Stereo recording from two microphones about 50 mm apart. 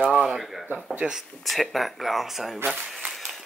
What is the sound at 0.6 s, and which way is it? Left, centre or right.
Speech, right.